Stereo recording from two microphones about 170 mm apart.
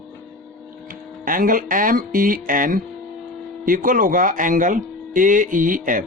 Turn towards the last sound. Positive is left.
turn(degrees=-50)  # may be behind; listen again after turning